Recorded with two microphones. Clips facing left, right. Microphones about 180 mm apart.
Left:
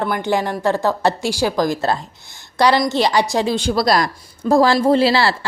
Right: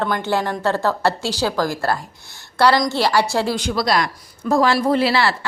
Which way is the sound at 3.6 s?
35° left (ahead or behind).